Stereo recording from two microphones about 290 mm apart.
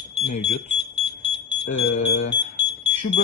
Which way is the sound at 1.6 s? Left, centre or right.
Left.